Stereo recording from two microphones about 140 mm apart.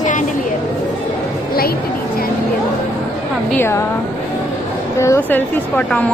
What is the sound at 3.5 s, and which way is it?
Speech, 15° left (ahead or behind).